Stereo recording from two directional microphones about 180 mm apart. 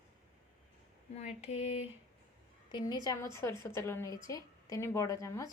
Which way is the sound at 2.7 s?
25° left (ahead or behind).